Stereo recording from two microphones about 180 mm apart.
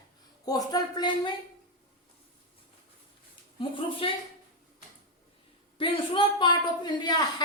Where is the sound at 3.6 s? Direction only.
30° left (ahead or behind).